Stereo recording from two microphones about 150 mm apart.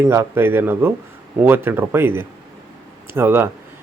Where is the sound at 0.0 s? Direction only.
15° right (ahead or behind).